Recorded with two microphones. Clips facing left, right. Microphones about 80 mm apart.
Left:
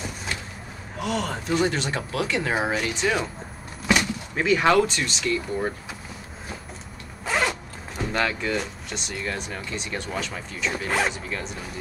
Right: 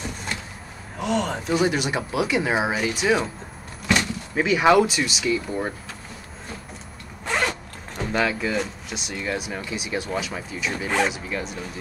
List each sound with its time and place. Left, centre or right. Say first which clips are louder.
0.9 s speech: right 3 dB; centre
3.8 s a sound: even; centre
4.4 s speech: right 2 dB; centre
7.2 s zipper: even; centre
8.1 s speech: right 2 dB; centre